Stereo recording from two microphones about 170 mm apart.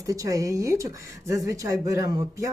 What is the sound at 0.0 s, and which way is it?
Speech, 20° right (ahead or behind).